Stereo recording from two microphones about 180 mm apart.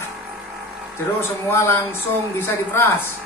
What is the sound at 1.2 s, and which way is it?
Speech, 15° left (ahead or behind).